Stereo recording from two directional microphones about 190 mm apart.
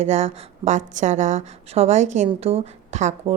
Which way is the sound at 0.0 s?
35° right (ahead or behind).